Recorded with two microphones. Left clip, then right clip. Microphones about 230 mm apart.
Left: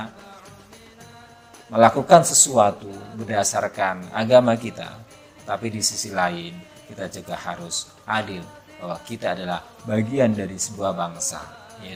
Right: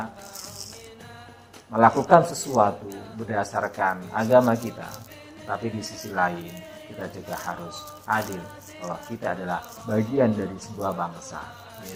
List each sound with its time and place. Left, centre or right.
1.7 s speech: left